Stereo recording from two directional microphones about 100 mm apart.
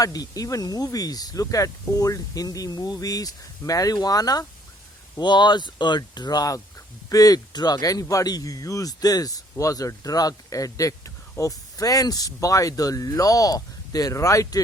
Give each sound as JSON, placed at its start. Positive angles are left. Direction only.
{"t": 0.0, "sound": "speech", "side_deg": 40}